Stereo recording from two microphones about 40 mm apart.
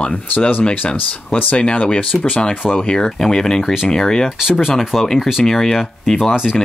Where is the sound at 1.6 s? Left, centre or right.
Left.